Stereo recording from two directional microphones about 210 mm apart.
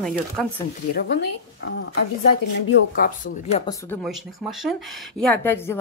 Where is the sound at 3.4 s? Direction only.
30° left (ahead or behind).